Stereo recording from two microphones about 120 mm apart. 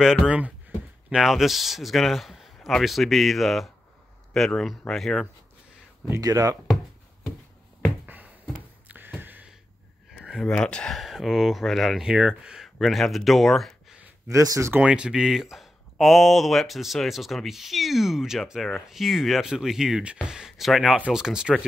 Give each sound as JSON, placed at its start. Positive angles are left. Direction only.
{"t": 0.0, "sound": "speech", "side_deg": -5}
{"t": 6.0, "sound": "speech", "side_deg": -25}
{"t": 8.8, "sound": "a sound", "side_deg": -15}
{"t": 10.4, "sound": "speech", "side_deg": 5}
{"t": 14.3, "sound": "speech", "side_deg": -30}
{"t": 14.7, "sound": "speech", "side_deg": -10}
{"t": 20.2, "sound": "a sound", "side_deg": -5}
{"t": 21.1, "sound": "speech", "side_deg": -5}